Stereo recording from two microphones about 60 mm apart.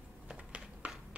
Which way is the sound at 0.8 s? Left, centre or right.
Right.